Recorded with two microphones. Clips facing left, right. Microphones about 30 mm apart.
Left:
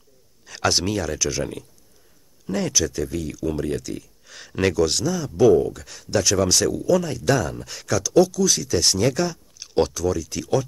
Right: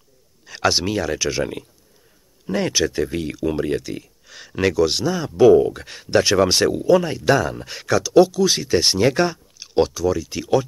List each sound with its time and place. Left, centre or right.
0.5 s speech: centre
4.3 s speech: centre
4.8 s speech: right
9.6 s speech: centre